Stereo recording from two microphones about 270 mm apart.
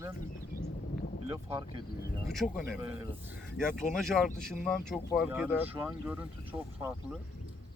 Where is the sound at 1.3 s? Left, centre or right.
Centre.